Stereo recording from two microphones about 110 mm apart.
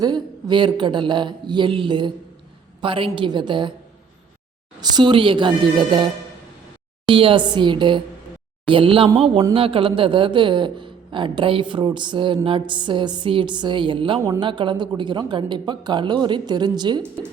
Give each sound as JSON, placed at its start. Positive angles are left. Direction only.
{"t": 0.0, "sound": "a man's voice", "side_deg": -40}
{"t": 4.8, "sound": "a man's voice", "side_deg": -45}
{"t": 7.1, "sound": "a man's voice", "side_deg": -55}